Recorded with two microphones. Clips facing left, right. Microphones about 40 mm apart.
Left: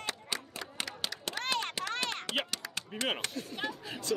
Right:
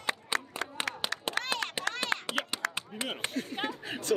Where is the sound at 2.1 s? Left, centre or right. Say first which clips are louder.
Right 8 dB; right.